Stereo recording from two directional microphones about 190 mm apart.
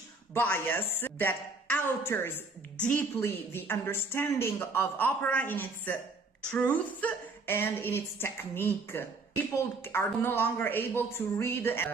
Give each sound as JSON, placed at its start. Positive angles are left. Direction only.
{"t": 0.3, "sound": "speech", "side_deg": 10}